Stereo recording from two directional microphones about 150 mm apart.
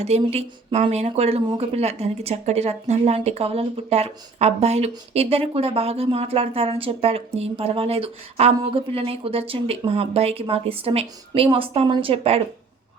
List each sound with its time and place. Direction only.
0.0 s speech: 45° right (ahead or behind)